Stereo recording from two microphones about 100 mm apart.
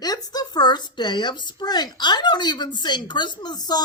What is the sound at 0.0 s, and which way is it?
Speech, 40° left (ahead or behind).